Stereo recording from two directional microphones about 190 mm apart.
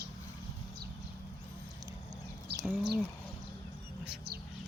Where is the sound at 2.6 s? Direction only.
Centre (ahead or behind).